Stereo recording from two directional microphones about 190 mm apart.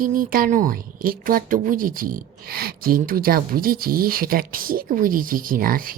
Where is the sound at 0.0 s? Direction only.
45° right (ahead or behind).